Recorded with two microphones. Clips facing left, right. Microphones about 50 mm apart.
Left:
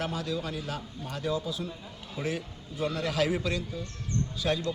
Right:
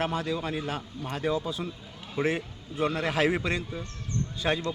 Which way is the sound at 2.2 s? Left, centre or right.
Right.